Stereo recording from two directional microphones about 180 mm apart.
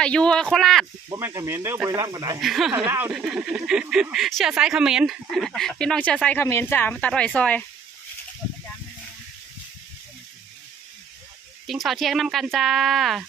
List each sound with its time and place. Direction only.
0.0 s speech: 5° left (ahead or behind)
1.1 s speech: 20° right (ahead or behind)
2.4 s speech: centre (ahead or behind)
11.6 s speech: centre (ahead or behind)